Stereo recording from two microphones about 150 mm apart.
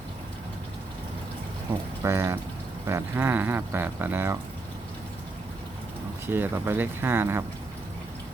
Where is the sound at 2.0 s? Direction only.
15° right (ahead or behind).